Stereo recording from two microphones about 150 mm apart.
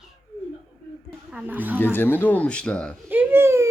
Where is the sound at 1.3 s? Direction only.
10° right (ahead or behind).